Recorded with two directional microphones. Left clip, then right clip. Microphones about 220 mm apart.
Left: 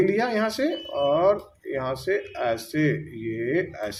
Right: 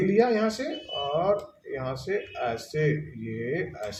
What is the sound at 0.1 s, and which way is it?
Speech, 45° left (ahead or behind).